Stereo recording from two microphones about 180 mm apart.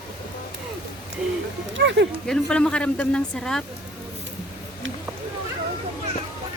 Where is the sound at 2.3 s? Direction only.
5° left (ahead or behind).